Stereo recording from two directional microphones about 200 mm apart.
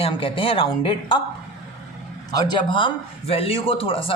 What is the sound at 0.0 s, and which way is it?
A man's voice, 25° left (ahead or behind).